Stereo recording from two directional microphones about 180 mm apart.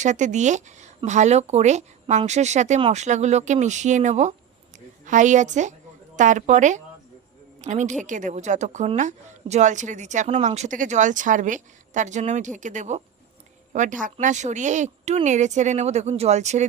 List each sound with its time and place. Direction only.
0.0 s a woman's voice: 40° right (ahead or behind)